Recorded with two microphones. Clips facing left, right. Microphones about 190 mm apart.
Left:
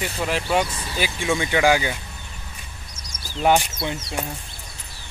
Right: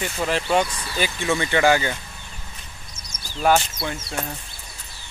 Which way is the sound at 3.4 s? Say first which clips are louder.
Even; 15° left (ahead or behind).